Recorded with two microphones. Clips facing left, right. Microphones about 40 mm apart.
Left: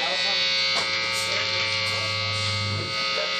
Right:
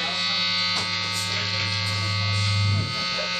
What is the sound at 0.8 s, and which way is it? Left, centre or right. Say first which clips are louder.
Mains hum: left 2 dB; centre.